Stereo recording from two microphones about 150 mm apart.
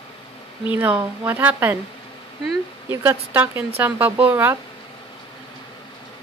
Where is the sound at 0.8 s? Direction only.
15° right (ahead or behind).